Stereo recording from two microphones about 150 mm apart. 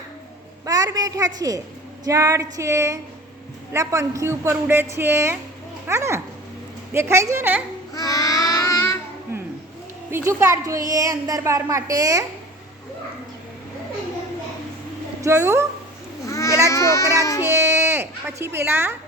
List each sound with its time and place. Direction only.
0.6 s a woman's voice: 25° right (ahead or behind)
7.9 s child singing: 25° left (ahead or behind)
10.1 s a woman's voice: 15° right (ahead or behind)
15.2 s a woman's voice: 20° right (ahead or behind)
16.2 s baby cry: 20° left (ahead or behind)
17.4 s a woman's voice: 15° right (ahead or behind)